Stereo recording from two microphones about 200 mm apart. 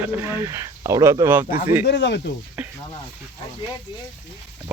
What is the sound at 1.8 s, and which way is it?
Speech, 60° left (ahead or behind).